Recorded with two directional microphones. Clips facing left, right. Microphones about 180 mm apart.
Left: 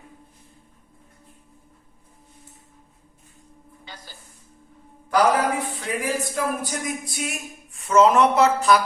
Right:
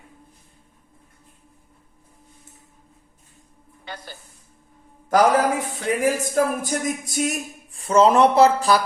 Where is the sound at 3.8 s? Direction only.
60° right (ahead or behind).